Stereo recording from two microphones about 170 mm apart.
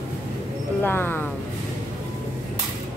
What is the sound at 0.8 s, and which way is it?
Speech, 10° left (ahead or behind).